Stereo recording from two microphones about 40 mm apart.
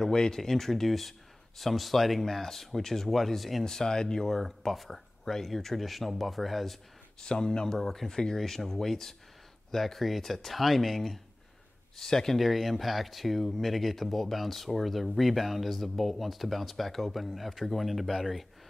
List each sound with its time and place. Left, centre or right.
0.0 s speech: centre
3.6 s speech: centre
4.3 s speech: centre
7.2 s speech: centre
12.4 s speech: centre